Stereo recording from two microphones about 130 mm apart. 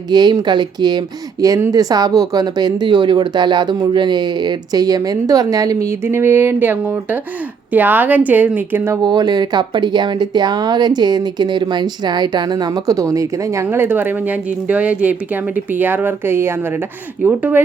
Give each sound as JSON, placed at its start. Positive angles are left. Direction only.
{"t": 0.1, "sound": "speech", "side_deg": -30}
{"t": 9.0, "sound": "speech", "side_deg": -30}